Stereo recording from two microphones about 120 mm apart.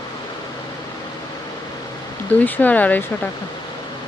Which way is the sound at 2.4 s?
15° left (ahead or behind).